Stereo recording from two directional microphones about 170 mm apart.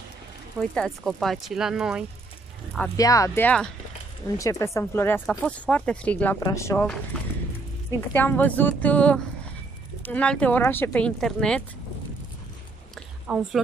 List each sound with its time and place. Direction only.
0.6 s speech: centre (ahead or behind)
3.0 s speech: 20° left (ahead or behind)
4.4 s speech: 20° left (ahead or behind)
8.1 s speech: 10° left (ahead or behind)
13.3 s speech: 5° right (ahead or behind)